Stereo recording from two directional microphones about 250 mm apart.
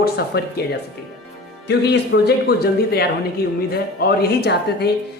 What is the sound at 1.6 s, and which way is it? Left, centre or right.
Speech, left.